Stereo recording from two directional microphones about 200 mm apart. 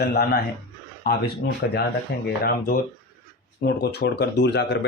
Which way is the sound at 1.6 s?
55° left (ahead or behind).